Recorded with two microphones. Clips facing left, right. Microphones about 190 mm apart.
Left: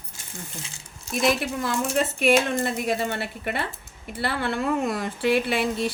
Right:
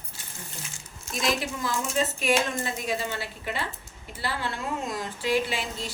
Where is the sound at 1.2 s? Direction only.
65° left (ahead or behind).